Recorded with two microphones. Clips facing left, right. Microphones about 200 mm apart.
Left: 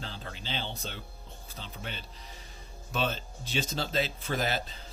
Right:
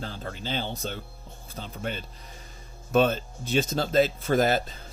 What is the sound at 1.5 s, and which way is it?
Speech, 45° right (ahead or behind).